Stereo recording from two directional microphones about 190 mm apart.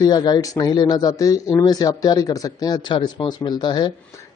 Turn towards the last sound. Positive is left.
turn(degrees=25)  # may be behind; listen again after turning